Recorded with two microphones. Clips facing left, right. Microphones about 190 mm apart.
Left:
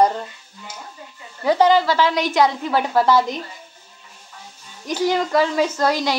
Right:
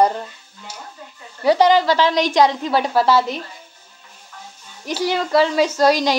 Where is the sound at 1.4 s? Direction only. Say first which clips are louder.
Right 1 dB; 15° right (ahead or behind).